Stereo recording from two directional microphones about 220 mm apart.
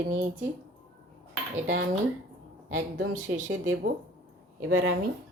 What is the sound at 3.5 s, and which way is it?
A woman's voice, 60° right (ahead or behind).